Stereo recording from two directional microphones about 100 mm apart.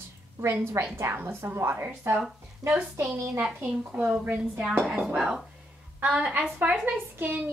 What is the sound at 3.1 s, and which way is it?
A woman's voice, 30° right (ahead or behind).